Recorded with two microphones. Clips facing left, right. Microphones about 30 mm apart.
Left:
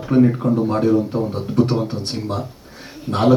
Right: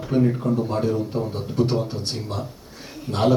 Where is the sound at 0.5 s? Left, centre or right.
Centre.